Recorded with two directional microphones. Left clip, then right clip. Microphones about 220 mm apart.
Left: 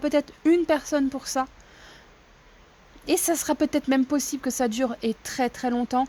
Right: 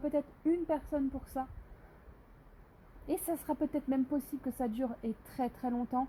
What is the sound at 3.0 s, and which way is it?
A woman's voice, 40° left (ahead or behind).